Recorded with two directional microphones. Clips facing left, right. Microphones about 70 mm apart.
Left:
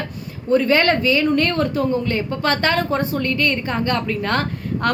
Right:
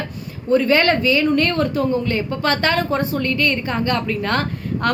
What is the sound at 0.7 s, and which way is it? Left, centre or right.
Speech, left.